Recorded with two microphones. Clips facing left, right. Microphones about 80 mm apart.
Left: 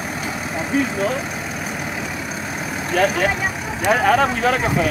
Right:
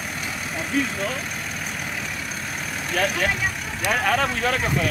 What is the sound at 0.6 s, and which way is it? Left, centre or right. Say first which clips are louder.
Speech: left 5 dB; centre.